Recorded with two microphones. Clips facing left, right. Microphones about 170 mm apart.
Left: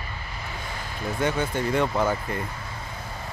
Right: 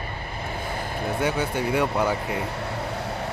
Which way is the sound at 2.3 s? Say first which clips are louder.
Right 5 dB; 70° right (ahead or behind).